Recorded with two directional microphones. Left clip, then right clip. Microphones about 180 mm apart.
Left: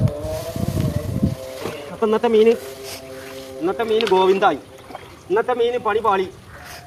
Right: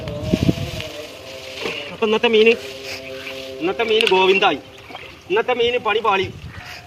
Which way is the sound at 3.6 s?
10° left (ahead or behind).